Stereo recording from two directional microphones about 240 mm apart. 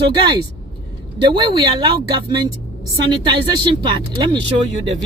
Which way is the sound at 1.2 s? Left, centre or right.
Centre.